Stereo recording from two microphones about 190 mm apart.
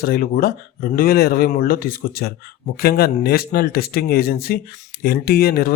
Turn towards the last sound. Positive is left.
turn(degrees=55)  # may be behind; listen again after turning